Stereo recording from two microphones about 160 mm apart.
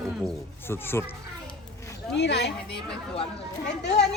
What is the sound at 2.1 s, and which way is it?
Speech, 90° left.